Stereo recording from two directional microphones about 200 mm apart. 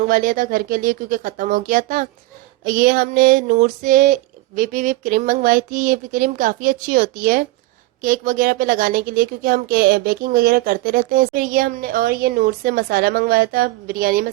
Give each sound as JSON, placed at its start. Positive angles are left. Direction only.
{"t": 0.1, "sound": "a woman's voice", "side_deg": -45}